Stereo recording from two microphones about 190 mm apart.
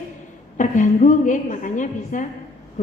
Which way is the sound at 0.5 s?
40° left (ahead or behind).